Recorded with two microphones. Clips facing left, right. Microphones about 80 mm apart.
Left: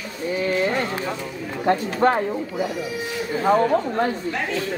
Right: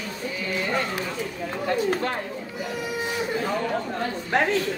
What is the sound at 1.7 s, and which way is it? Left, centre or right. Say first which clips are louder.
Speech: left 5 dB; left.